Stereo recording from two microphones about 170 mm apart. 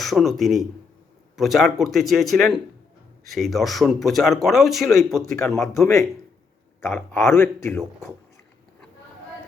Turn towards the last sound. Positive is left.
turn(degrees=15)  # may be behind; listen again after turning